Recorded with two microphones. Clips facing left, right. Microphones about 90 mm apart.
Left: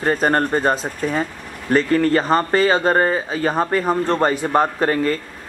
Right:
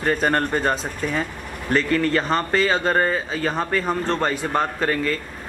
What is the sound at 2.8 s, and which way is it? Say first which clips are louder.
Speech: left 3 dB; 15° left (ahead or behind).